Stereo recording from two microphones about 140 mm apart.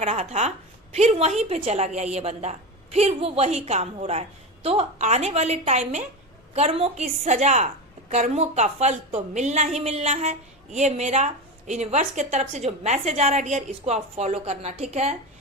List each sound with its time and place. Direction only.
0.0 s a woman's voice: 50° right (ahead or behind)